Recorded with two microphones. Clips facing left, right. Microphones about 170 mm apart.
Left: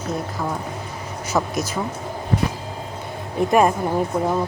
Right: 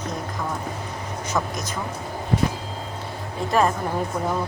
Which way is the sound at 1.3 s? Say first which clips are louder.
Left 5 dB; 5° left (ahead or behind).